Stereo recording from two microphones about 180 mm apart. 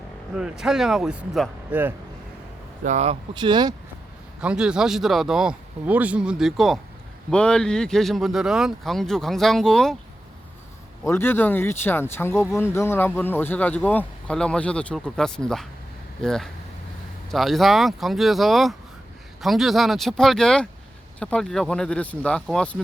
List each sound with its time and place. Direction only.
0.3 s speech: 5° right (ahead or behind)
2.8 s speech: 40° right (ahead or behind)
3.3 s speech: 25° right (ahead or behind)
4.4 s speech: 5° right (ahead or behind)
11.1 s speech: 10° left (ahead or behind)